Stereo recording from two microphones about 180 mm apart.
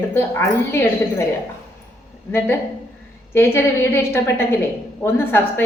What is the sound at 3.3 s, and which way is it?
Speech, 15° left (ahead or behind).